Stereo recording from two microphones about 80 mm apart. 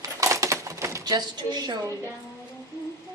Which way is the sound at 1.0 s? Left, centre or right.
Right.